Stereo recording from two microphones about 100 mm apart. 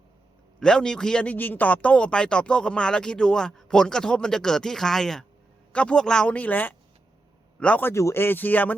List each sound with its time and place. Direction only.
0.6 s a man's voice: 10° left (ahead or behind)